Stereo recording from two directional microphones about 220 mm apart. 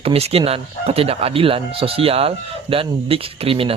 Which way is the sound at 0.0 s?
25° right (ahead or behind).